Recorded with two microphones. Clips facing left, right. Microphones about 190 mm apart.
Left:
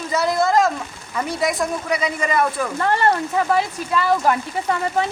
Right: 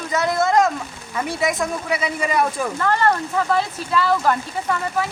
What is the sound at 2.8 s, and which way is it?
Speech, 20° left (ahead or behind).